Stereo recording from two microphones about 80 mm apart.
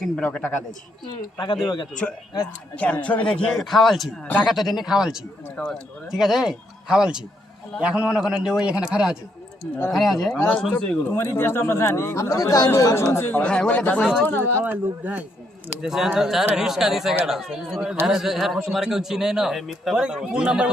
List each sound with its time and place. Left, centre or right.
0.2 s speech: centre
1.0 s a man's voice: left
2.7 s speech: centre
3.5 s a man's voice: centre
5.6 s speech: centre
6.1 s a man's voice: centre
11.1 s speech: left
14.6 s speech: right
15.8 s a man's voice: centre